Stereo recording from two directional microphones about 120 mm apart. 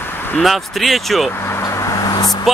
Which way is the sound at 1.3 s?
20° left (ahead or behind).